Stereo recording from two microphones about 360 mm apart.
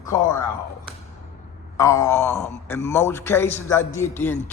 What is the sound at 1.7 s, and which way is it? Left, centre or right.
A man's voice, centre.